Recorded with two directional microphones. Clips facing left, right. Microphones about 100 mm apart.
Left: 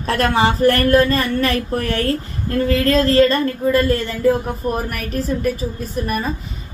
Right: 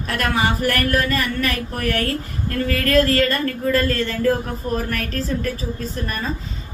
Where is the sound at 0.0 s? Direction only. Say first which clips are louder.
Left 5 dB; 30° left (ahead or behind).